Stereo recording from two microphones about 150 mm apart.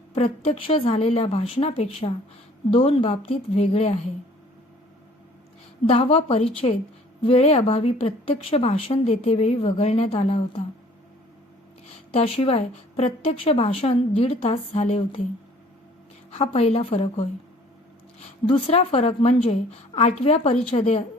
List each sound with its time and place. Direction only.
0.1 s a woman's voice: 45° left (ahead or behind)
5.9 s a woman's voice: 40° left (ahead or behind)
12.1 s a woman's voice: 40° left (ahead or behind)
16.3 s a woman's voice: 40° left (ahead or behind)